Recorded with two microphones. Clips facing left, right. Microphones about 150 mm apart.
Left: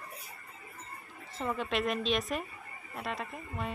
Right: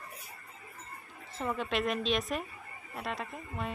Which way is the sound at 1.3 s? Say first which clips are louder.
Even; centre (ahead or behind).